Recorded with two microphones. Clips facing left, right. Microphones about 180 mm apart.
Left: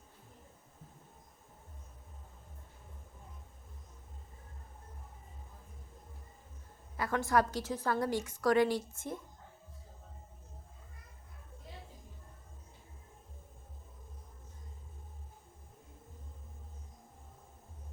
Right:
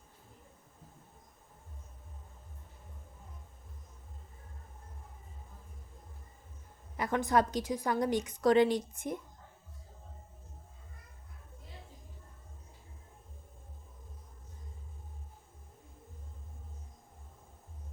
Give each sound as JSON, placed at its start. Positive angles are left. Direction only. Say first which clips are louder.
{"t": 6.9, "sound": "a woman's voice", "louder": "right 1 dB", "side_deg": -20}